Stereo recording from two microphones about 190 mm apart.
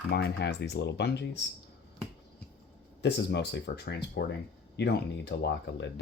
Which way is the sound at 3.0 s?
65° left (ahead or behind).